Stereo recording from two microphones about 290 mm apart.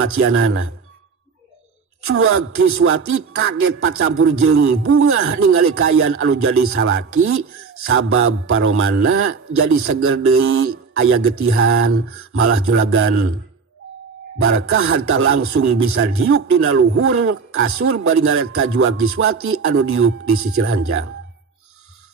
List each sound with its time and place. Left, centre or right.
0.0 s a man's voice: right
2.0 s a man's voice: right
14.4 s a man's voice: right